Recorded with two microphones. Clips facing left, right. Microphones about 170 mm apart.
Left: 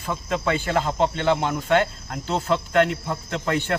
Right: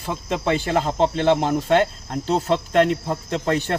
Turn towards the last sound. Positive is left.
turn(degrees=-35)  # may be behind; listen again after turning